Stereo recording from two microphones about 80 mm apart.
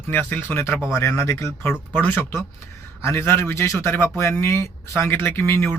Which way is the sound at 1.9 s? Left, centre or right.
Left.